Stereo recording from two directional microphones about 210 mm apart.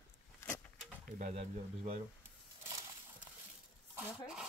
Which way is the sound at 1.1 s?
40° right (ahead or behind).